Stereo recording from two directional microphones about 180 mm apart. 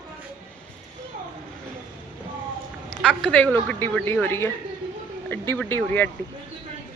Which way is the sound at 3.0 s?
5° left (ahead or behind).